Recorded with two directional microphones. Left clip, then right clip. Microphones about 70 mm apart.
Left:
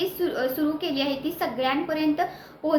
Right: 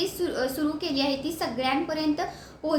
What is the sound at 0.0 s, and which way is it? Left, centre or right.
A woman's voice, right.